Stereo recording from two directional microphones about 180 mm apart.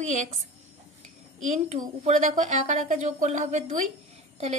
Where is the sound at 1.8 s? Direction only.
45° right (ahead or behind).